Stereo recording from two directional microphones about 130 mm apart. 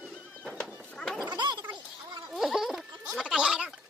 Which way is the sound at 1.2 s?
35° right (ahead or behind).